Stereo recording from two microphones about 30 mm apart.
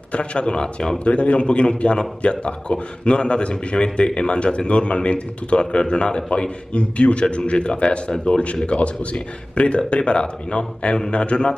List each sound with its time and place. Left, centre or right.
0.1 s a man's voice: left
0.9 s a man's voice: left